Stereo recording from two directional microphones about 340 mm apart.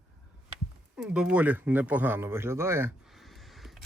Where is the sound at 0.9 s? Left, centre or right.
Centre.